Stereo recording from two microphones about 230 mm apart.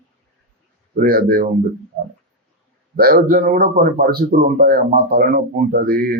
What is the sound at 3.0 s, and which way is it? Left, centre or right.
Speech, right.